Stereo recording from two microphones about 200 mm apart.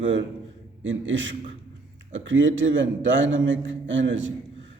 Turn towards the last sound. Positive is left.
turn(degrees=-70)  # may be behind; listen again after turning